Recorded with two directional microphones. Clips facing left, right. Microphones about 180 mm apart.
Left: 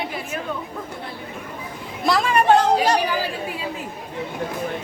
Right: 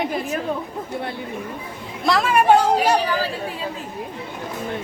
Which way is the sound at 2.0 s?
Centre (ahead or behind).